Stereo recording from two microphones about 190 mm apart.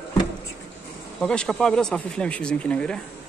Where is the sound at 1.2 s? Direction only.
5° left (ahead or behind).